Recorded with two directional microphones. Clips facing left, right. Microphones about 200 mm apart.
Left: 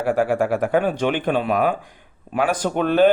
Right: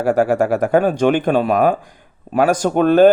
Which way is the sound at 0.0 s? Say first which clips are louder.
Right 4 dB; 40° right (ahead or behind).